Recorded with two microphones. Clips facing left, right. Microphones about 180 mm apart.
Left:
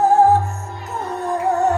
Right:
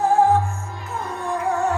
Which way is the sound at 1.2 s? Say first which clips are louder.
Left 4 dB; 40° left (ahead or behind).